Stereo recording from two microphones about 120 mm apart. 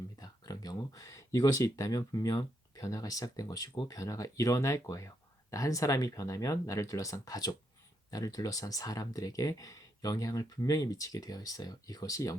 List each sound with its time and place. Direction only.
0.2 s speech: 30° left (ahead or behind)